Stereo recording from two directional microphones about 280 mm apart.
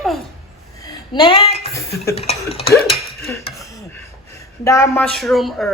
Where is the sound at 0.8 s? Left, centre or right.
Centre.